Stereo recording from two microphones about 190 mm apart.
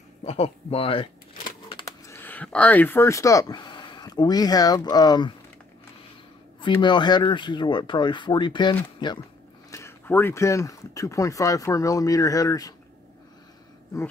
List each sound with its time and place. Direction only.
0.2 s speech: 35° left (ahead or behind)
6.8 s speech: 25° left (ahead or behind)